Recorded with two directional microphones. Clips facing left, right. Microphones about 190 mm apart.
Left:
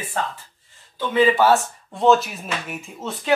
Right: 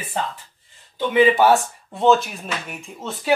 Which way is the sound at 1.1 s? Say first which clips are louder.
Right 1 dB; 15° right (ahead or behind).